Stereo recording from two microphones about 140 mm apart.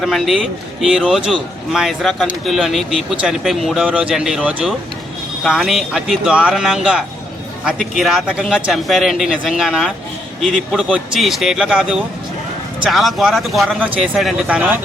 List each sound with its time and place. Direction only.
0.0 s speech: centre (ahead or behind)